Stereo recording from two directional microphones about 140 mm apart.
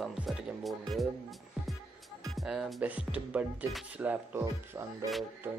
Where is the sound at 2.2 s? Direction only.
Centre (ahead or behind).